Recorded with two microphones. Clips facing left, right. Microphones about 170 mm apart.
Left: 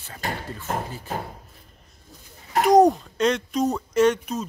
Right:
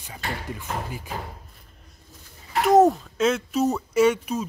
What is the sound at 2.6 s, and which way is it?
Speech, centre (ahead or behind).